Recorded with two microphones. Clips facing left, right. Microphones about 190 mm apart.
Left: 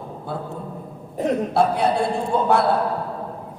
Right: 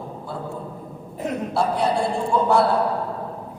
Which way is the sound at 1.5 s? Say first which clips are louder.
Even; 60° left (ahead or behind).